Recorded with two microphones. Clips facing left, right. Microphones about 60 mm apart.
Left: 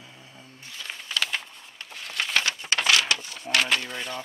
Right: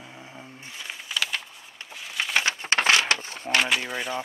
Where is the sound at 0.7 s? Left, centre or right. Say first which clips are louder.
Left 1 dB; centre.